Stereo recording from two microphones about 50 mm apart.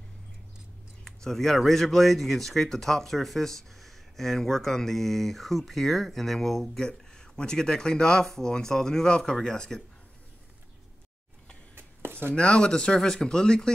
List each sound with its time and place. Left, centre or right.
1.0 s speech: centre
6.8 s speech: centre
11.7 s a sound: right
12.4 s speech: centre